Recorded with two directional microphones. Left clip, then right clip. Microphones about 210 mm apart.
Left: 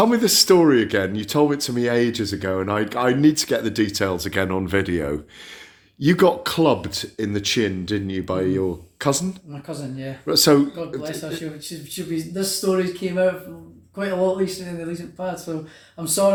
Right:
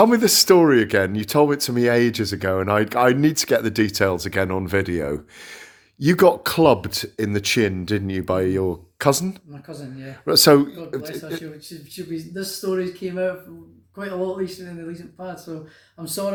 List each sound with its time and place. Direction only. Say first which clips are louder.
0.0 s speech: right 2 dB; 35° right (ahead or behind)
12.1 s speech: left 5 dB; centre (ahead or behind)